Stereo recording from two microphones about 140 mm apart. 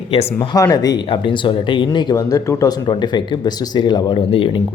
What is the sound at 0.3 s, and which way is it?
Speech, 25° left (ahead or behind).